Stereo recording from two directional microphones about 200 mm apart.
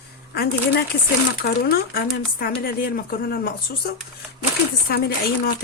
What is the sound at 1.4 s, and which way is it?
A woman's voice, 50° left (ahead or behind).